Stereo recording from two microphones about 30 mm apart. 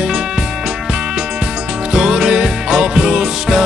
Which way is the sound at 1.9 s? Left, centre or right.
Right.